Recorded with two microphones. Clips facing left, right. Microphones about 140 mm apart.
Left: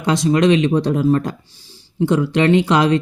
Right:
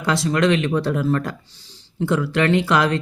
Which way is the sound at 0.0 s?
20° left (ahead or behind).